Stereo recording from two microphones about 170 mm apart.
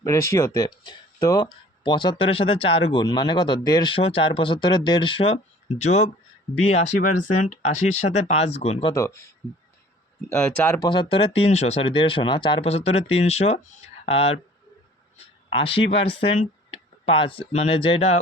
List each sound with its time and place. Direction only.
0.0 s speech: 20° left (ahead or behind); by 8.9 s 40° left (ahead or behind)
8.9 s speech: 15° left (ahead or behind)
10.2 s speech: 10° left (ahead or behind)
10.8 s speech: 25° left (ahead or behind)
15.4 s speech: 30° left (ahead or behind)